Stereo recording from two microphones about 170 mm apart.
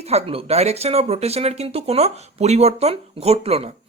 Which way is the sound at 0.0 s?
40° right (ahead or behind).